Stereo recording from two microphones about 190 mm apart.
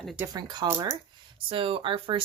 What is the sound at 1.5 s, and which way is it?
Speech, 30° right (ahead or behind).